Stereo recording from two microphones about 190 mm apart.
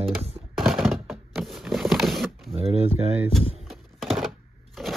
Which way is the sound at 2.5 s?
30° right (ahead or behind).